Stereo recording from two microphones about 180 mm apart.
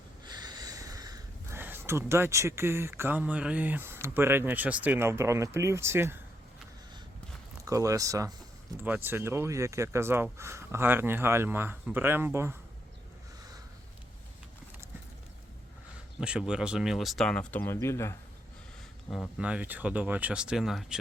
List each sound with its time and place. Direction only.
0.3 s a sound: 20° right (ahead or behind)
4.0 s speech: 15° right (ahead or behind)
7.6 s speech: 20° right (ahead or behind)
16.2 s speech: 5° right (ahead or behind); by 18.2 s 15° left (ahead or behind)
19.4 s speech: 5° right (ahead or behind)